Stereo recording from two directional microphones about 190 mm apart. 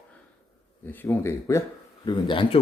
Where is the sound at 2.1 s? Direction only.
25° left (ahead or behind).